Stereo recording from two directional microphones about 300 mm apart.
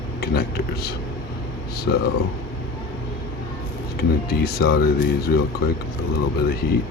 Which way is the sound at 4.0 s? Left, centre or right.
Left.